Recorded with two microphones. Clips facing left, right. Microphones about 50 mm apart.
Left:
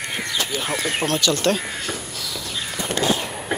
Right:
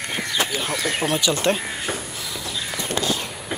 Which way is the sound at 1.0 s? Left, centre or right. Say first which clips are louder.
Even; centre.